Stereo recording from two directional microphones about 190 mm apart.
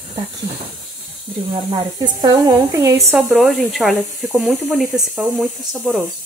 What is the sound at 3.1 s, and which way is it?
Speech, centre (ahead or behind).